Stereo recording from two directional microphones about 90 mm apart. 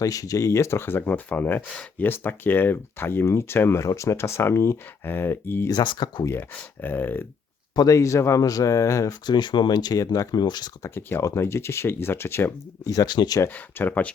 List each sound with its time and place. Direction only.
0.0 s speech: 40° left (ahead or behind)
5.7 s speech: 55° left (ahead or behind)
6.8 s speech: 20° left (ahead or behind)
7.8 s speech: 35° left (ahead or behind)
9.2 s speech: 55° left (ahead or behind)
10.8 s speech: 30° left (ahead or behind)
12.9 s speech: 50° left (ahead or behind)
13.5 s speech: 20° left (ahead or behind)